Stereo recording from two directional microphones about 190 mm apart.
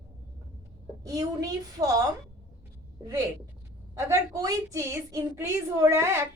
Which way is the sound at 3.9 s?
15° right (ahead or behind).